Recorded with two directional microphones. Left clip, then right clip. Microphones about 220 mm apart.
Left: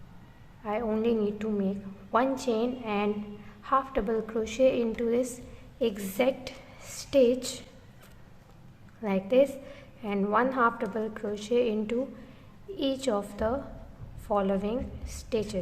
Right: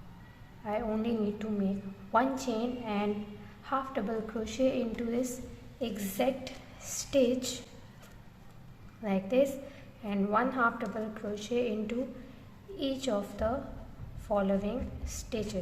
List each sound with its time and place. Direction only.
0.6 s a woman's voice: 20° left (ahead or behind)
9.0 s a woman's voice: 20° left (ahead or behind)